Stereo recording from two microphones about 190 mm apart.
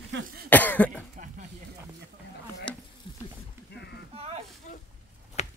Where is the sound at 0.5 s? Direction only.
10° left (ahead or behind).